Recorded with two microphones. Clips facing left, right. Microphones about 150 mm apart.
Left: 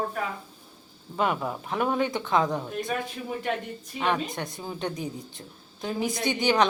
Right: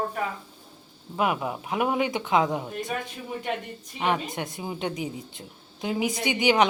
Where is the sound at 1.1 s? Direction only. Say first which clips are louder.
Right 1 dB; 10° right (ahead or behind).